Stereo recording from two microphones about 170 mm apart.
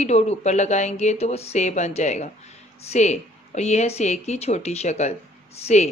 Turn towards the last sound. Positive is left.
turn(degrees=40)  # may be behind; listen again after turning